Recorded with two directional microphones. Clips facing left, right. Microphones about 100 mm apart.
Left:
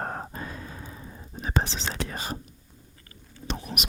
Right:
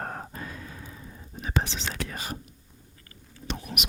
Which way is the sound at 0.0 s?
30° left (ahead or behind).